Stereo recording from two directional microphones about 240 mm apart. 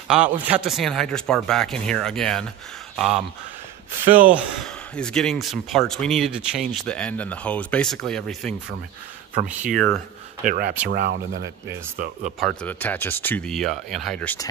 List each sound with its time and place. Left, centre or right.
0.1 s speech: centre
9.8 s speech: right
12.4 s speech: centre